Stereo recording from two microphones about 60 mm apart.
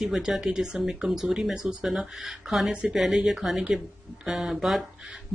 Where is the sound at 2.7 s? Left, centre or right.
Centre.